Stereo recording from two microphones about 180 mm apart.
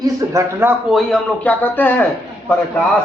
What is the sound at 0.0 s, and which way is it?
Speech, 15° right (ahead or behind).